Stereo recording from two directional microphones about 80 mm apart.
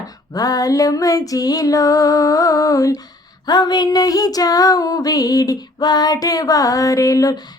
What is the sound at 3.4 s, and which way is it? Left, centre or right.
Female singing, left.